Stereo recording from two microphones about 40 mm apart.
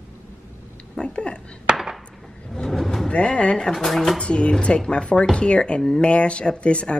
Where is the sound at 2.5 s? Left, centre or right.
Centre.